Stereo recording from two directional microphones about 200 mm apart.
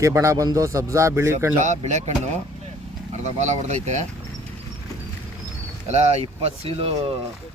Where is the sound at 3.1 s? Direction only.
35° right (ahead or behind).